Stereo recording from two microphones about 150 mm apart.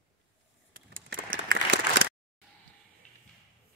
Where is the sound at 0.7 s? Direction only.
70° right (ahead or behind).